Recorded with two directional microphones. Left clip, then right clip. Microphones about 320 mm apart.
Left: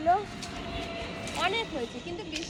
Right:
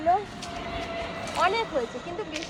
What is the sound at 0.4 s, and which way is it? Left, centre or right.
Vehicle, centre.